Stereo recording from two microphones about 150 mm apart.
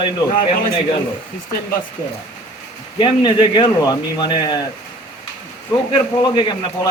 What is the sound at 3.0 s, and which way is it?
Speech, 35° left (ahead or behind).